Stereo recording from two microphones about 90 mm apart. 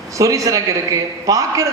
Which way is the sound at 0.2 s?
40° right (ahead or behind).